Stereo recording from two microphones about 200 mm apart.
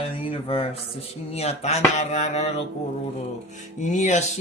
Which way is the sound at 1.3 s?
30° left (ahead or behind).